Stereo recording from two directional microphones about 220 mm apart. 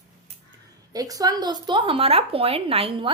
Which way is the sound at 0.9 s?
15° right (ahead or behind).